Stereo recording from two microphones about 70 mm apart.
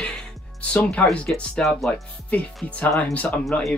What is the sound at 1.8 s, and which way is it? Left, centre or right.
Speech, centre.